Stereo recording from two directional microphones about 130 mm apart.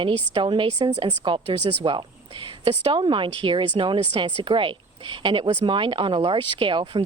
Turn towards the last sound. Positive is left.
turn(degrees=-40)  # may be behind; listen again after turning